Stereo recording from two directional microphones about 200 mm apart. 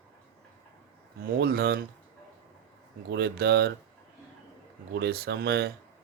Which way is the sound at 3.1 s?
55° right (ahead or behind).